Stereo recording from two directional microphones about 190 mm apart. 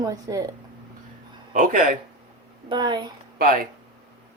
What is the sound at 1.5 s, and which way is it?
Speech, 45° right (ahead or behind).